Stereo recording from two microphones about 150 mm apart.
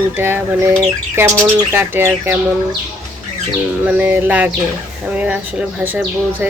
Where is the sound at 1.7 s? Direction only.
15° right (ahead or behind).